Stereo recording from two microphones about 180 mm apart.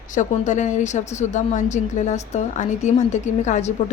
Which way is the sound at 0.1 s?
45° left (ahead or behind).